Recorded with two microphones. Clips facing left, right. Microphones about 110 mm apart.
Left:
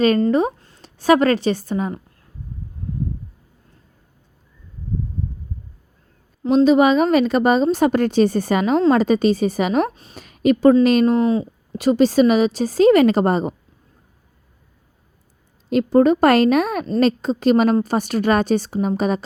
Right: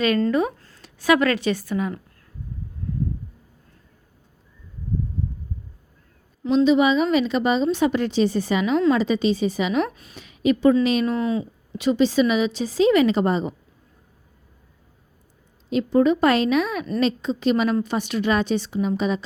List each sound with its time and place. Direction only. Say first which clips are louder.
0.3 s a woman's voice: left 4 dB; 30° left (ahead or behind)
6.4 s a woman's voice: left 4 dB; 40° left (ahead or behind)
9.9 s a woman's voice: left 2 dB; 30° left (ahead or behind)
10.2 s a woman's voice: left 4 dB; 45° left (ahead or behind)
15.7 s a woman's voice: left 4 dB; 50° left (ahead or behind)